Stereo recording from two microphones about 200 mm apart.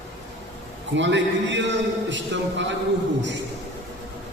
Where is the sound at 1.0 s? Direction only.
65° right (ahead or behind).